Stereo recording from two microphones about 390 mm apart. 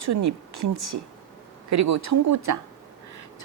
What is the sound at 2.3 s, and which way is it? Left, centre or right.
Speech, right.